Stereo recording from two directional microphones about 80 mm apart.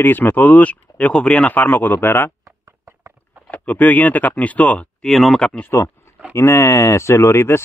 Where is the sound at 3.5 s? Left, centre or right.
Centre.